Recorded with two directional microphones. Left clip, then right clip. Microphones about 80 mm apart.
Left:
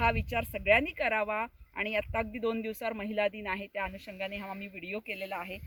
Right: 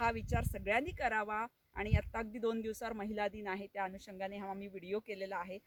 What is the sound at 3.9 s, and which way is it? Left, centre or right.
Speech, right.